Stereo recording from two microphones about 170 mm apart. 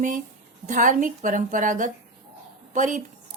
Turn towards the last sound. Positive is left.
turn(degrees=-50)  # may be behind; listen again after turning